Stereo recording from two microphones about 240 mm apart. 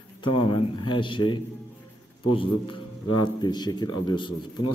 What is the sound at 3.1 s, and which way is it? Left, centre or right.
A man's voice, centre.